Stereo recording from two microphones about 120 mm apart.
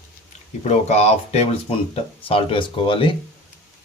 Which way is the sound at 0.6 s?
65° left (ahead or behind).